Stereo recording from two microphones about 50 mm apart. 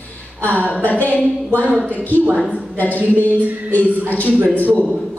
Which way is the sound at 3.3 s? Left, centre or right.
Right.